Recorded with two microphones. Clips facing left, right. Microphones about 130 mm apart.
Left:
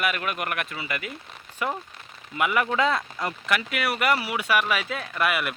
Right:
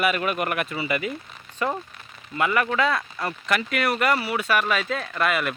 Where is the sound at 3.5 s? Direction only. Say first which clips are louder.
Right 3 dB; 5° left (ahead or behind).